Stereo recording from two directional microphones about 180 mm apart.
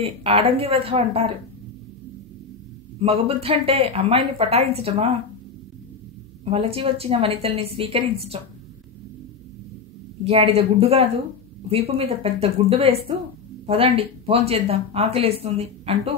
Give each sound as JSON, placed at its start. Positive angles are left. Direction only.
{"t": 0.0, "sound": "speech", "side_deg": -30}
{"t": 3.0, "sound": "speech", "side_deg": -35}
{"t": 6.5, "sound": "speech", "side_deg": -30}
{"t": 10.2, "sound": "speech", "side_deg": -35}